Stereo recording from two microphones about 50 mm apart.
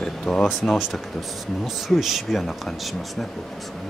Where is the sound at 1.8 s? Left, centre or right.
Centre.